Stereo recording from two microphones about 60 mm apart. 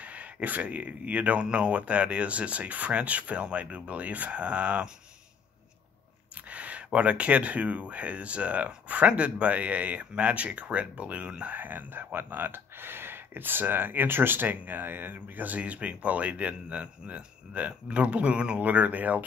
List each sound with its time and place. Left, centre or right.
0.0 s speech: right
6.5 s speech: right